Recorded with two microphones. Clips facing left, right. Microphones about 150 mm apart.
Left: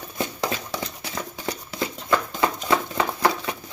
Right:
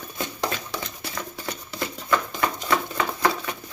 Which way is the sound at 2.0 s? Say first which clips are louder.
Left 1 dB; 20° left (ahead or behind).